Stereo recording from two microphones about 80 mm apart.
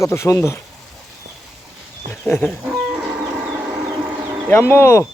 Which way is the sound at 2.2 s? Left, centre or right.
Centre.